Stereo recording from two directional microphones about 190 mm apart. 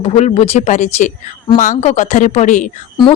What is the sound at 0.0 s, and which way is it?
Speech, 35° left (ahead or behind).